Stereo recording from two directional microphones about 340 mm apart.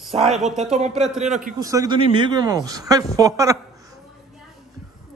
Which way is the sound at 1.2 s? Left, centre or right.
Right.